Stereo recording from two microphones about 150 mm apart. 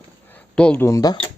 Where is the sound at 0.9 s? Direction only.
20° left (ahead or behind).